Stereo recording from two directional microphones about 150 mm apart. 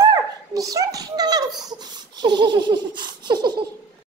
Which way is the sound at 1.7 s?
30° right (ahead or behind).